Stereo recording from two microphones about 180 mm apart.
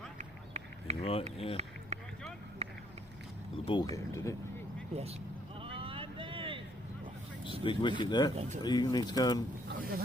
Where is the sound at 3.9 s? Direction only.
15° left (ahead or behind).